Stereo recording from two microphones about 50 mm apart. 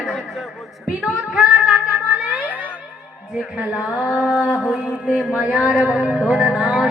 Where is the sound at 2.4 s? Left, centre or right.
Right.